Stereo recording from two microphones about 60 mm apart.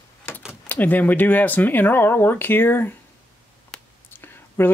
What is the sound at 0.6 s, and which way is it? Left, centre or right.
Speech, left.